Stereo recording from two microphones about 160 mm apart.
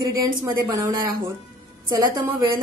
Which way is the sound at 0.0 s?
20° right (ahead or behind).